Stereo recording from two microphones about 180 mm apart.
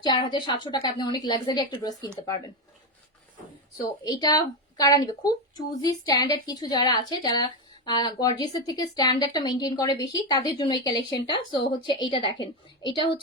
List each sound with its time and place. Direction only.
0.0 s speech: 25° left (ahead or behind)
4.0 s speech: 20° left (ahead or behind)